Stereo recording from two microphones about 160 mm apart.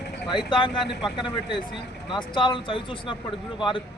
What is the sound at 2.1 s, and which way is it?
Speech, 30° left (ahead or behind).